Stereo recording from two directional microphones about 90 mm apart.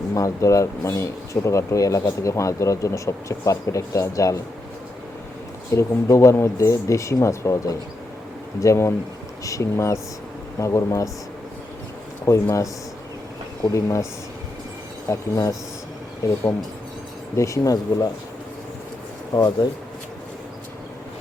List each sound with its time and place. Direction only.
0.1 s speech: 35° left (ahead or behind)
5.7 s speech: 35° left (ahead or behind)
12.2 s speech: 35° left (ahead or behind)
13.7 s speech: 35° left (ahead or behind)
15.1 s speech: 35° left (ahead or behind)
19.3 s speech: 50° left (ahead or behind)